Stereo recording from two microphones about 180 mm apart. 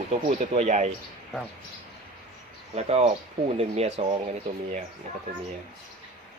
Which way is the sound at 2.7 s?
35° right (ahead or behind).